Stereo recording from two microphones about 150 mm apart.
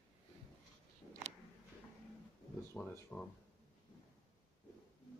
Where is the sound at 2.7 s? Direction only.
10° left (ahead or behind).